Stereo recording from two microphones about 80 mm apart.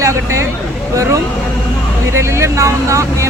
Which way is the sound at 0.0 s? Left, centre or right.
Right.